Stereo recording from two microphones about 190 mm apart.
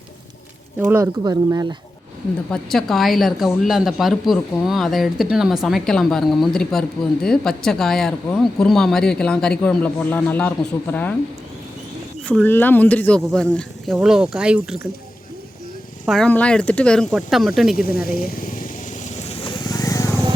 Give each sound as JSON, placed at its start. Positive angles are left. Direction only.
{"t": 0.8, "sound": "speech", "side_deg": -10}
{"t": 2.5, "sound": "speech", "side_deg": 0}
{"t": 12.4, "sound": "speech", "side_deg": 10}
{"t": 16.0, "sound": "speech", "side_deg": 5}
{"t": 17.9, "sound": "speech", "side_deg": 50}
{"t": 18.4, "sound": "vehicle", "side_deg": 45}